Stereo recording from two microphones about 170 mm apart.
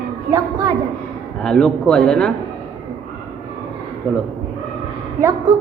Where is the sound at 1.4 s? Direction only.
5° left (ahead or behind).